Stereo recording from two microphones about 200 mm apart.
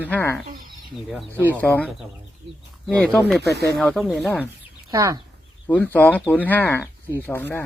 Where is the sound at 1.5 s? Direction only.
5° left (ahead or behind).